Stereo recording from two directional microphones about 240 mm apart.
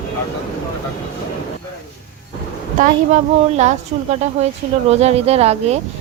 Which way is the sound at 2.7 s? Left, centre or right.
Right.